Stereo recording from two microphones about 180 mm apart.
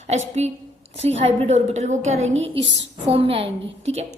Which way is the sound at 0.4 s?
35° right (ahead or behind).